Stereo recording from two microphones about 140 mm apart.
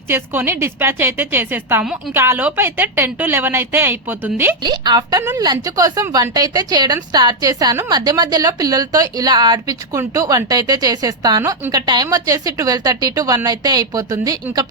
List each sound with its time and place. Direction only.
0.1 s a woman's voice: 15° right (ahead or behind)
4.6 s a woman's voice: 30° right (ahead or behind)